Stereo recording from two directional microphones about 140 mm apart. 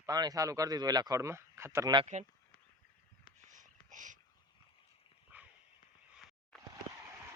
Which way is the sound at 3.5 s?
65° right (ahead or behind).